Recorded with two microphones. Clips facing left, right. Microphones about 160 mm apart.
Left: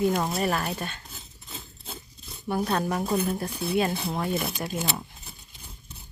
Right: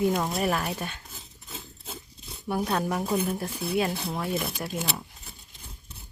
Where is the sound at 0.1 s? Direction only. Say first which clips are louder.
Even; centre (ahead or behind).